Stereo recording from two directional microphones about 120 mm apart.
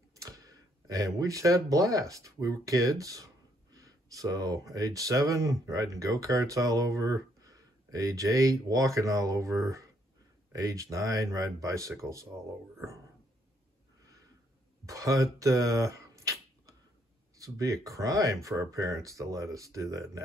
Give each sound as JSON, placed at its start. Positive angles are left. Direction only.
{"t": 0.1, "sound": "speech", "side_deg": -25}
{"t": 14.9, "sound": "speech", "side_deg": -25}
{"t": 15.3, "sound": "a sound", "side_deg": -25}
{"t": 17.4, "sound": "speech", "side_deg": -30}